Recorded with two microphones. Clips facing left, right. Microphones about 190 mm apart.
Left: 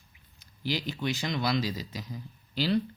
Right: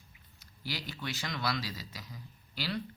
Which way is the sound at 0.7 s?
20° left (ahead or behind).